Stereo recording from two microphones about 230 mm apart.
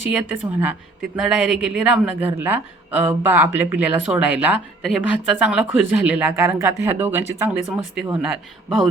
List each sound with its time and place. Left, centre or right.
0.1 s a woman's voice: centre